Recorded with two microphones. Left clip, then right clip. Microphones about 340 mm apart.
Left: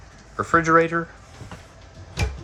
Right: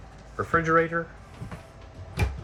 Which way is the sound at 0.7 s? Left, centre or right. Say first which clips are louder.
Left 4 dB; centre.